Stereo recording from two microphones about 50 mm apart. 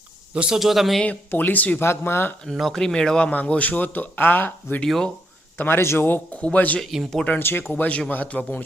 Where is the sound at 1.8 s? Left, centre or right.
Left.